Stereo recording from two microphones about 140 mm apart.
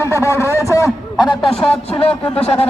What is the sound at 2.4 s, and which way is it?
Speech, 45° left (ahead or behind).